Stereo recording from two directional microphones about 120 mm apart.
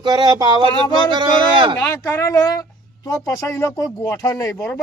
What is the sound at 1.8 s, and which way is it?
Speech, 20° left (ahead or behind).